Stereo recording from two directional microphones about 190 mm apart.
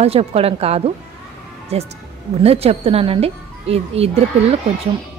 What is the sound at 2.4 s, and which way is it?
Speech, 30° right (ahead or behind).